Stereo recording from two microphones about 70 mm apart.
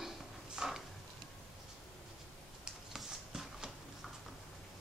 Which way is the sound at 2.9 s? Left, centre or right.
Centre.